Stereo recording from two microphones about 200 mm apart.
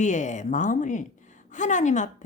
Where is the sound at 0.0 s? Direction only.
35° left (ahead or behind).